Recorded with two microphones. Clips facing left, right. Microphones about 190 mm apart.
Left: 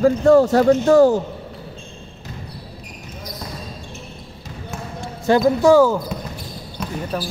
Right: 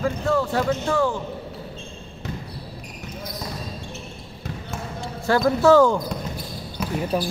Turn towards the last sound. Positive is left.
turn(degrees=-10)  # may be behind; listen again after turning